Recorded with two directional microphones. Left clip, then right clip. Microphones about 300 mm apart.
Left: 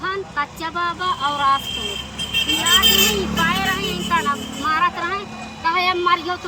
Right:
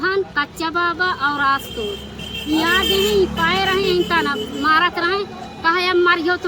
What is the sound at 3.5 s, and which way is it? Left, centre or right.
Speech, right.